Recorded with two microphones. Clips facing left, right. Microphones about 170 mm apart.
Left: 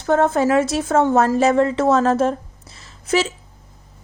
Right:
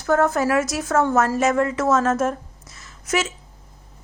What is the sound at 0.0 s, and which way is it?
A woman's voice, 25° left (ahead or behind).